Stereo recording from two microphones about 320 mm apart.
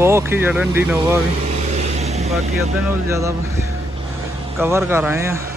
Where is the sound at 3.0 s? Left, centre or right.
Centre.